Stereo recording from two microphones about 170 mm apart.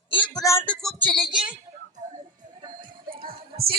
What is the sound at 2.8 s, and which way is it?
Music, 60° right (ahead or behind).